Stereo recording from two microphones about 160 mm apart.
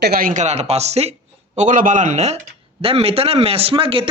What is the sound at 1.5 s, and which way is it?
A man's voice, 55° right (ahead or behind).